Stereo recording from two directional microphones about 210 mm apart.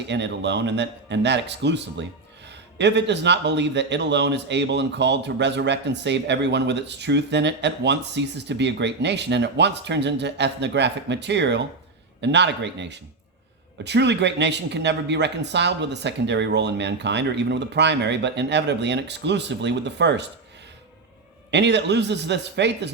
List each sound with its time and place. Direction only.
0.1 s speech: 55° right (ahead or behind)
21.5 s speech: 55° right (ahead or behind)